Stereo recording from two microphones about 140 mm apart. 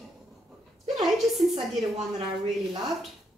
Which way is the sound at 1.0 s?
Centre (ahead or behind).